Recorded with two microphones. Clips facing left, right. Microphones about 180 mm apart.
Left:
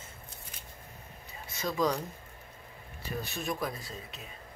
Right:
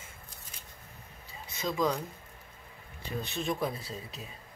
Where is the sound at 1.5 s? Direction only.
15° right (ahead or behind).